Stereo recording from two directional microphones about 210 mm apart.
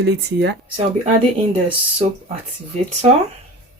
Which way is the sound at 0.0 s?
50° right (ahead or behind).